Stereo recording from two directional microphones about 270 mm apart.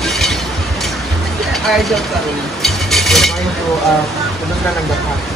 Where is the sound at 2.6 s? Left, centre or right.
Centre.